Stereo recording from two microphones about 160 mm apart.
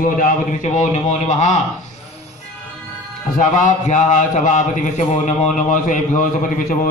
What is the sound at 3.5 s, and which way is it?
A man's voice, 50° left (ahead or behind).